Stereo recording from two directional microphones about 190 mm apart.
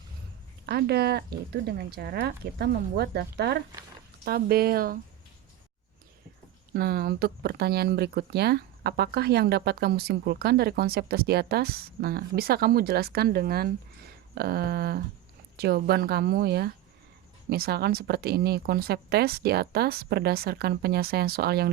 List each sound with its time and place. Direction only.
0.6 s speech: 60° right (ahead or behind)
6.7 s speech: 55° right (ahead or behind)